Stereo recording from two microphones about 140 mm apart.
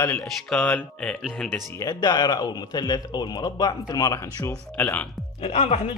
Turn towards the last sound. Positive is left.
turn(degrees=50)  # may be behind; listen again after turning